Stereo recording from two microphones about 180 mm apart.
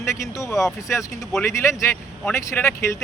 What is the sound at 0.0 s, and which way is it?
Speech, 15° left (ahead or behind).